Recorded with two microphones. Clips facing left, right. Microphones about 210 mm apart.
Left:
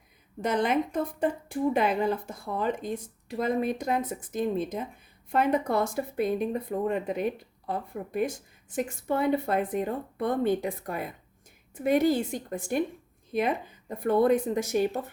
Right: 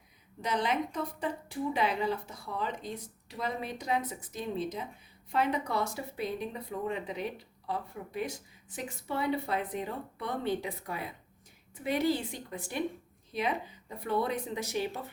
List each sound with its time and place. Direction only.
0.4 s speech: 50° left (ahead or behind)